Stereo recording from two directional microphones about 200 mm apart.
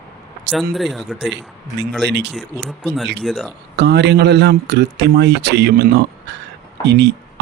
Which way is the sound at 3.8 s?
55° right (ahead or behind).